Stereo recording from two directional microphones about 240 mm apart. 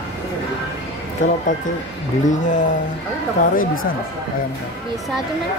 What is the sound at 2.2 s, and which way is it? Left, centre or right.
Speech, left.